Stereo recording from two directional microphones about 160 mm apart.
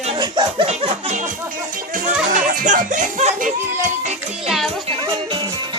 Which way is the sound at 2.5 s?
55° right (ahead or behind).